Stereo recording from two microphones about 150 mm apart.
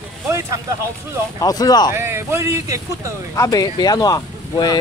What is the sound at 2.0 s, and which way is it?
Speech, 15° right (ahead or behind).